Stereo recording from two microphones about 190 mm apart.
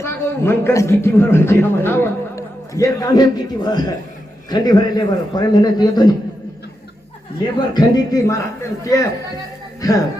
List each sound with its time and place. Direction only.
0.0 s a man's voice: 15° left (ahead or behind)
7.7 s a man's voice: 20° left (ahead or behind)